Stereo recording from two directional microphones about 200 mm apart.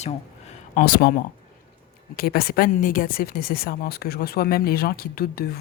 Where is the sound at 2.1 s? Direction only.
50° left (ahead or behind).